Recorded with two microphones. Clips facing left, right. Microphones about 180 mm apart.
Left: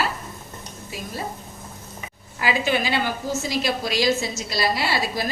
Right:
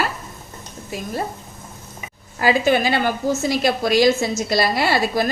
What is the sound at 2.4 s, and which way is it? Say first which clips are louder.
A woman's voice: right 6 dB; 45° right (ahead or behind).